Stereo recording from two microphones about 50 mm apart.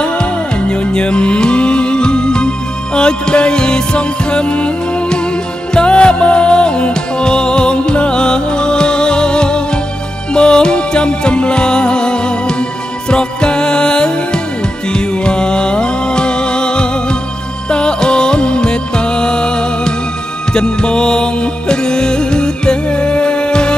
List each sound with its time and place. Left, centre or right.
0.0 s music: centre
5.8 s music: left